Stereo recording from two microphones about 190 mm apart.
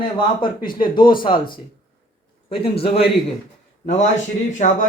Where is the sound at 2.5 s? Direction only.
30° left (ahead or behind).